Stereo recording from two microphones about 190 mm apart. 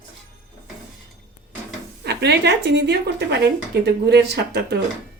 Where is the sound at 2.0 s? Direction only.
60° right (ahead or behind).